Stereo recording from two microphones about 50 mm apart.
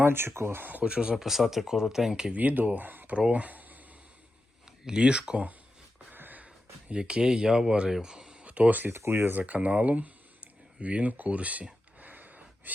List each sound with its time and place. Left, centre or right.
0.0 s speech: right
0.9 s speech: right
1.1 s speech: centre
2.3 s speech: right
3.2 s speech: right
4.9 s speech: centre
6.1 s a sound: right
7.0 s speech: centre
7.9 s a sound: centre
8.4 s speech: right
8.9 s speech: right
9.4 s a sound: right